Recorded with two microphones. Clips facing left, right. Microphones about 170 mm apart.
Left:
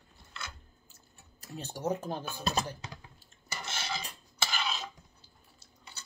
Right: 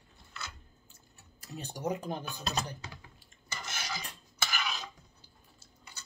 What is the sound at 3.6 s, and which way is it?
Stir, 25° left (ahead or behind).